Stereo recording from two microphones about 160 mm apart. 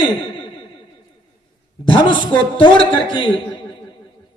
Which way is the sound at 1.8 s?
30° left (ahead or behind).